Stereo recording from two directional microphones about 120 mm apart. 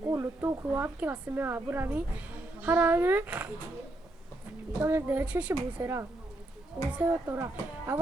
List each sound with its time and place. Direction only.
0.1 s a woman's voice: 20° right (ahead or behind)
4.8 s a woman's voice: 20° right (ahead or behind)